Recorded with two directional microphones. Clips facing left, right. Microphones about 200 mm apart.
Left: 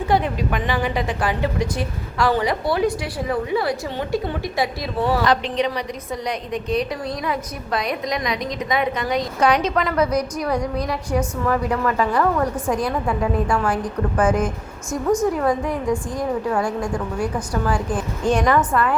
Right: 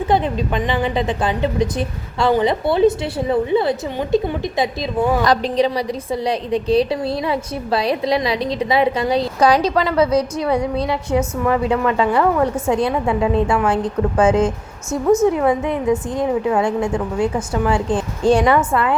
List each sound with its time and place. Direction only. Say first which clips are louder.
0.1 s a woman's voice: right 2 dB; 25° right (ahead or behind)
5.2 s a woman's voice: right 4 dB; 35° right (ahead or behind)